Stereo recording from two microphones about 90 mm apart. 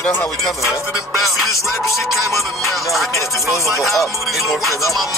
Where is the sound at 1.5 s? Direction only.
35° left (ahead or behind).